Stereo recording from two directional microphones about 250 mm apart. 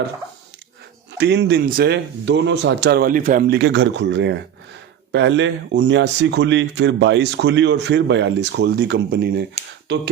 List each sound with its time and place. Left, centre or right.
1.2 s speech: right